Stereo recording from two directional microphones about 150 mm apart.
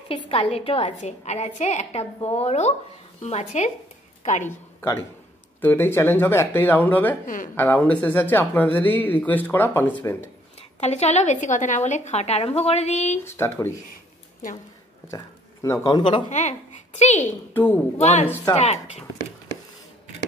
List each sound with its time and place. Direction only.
0.1 s a woman's voice: 35° left (ahead or behind); by 4.5 s 55° left (ahead or behind)
5.6 s speech: 15° left (ahead or behind)
7.2 s a woman's voice: 65° left (ahead or behind)
7.5 s speech: 10° left (ahead or behind)
10.8 s a woman's voice: 50° left (ahead or behind)
13.2 s speech: 15° left (ahead or behind)
15.0 s speech: 20° left (ahead or behind)
16.3 s a woman's voice: 50° left (ahead or behind)
17.6 s speech: 10° left (ahead or behind)
17.9 s a woman's voice: 45° left (ahead or behind)